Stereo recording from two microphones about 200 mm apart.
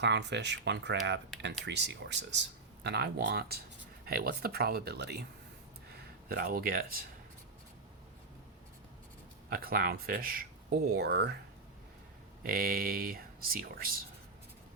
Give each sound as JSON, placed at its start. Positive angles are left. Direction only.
{"t": 0.0, "sound": "speech", "side_deg": -60}
{"t": 6.2, "sound": "speech", "side_deg": -45}
{"t": 9.5, "sound": "speech", "side_deg": -45}
{"t": 12.4, "sound": "speech", "side_deg": -45}